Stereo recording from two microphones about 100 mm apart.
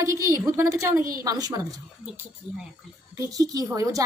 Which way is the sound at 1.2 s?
40° right (ahead or behind).